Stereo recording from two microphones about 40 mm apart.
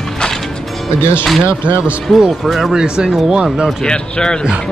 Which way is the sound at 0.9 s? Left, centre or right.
Left.